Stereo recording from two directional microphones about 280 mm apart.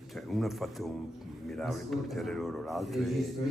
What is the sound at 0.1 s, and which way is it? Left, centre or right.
A man's voice, centre.